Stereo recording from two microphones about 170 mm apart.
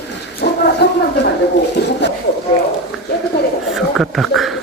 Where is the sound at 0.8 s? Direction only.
75° left (ahead or behind).